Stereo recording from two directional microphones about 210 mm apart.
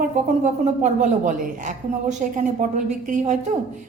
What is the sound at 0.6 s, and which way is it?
Speech, 35° right (ahead or behind).